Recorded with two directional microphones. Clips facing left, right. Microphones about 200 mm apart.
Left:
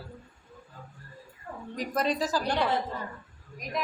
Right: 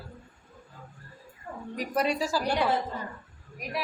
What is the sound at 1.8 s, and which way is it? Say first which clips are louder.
A woman's voice: right 1 dB; 10° right (ahead or behind).